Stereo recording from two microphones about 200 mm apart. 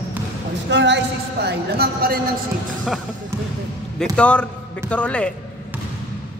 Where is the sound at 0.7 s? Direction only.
60° right (ahead or behind).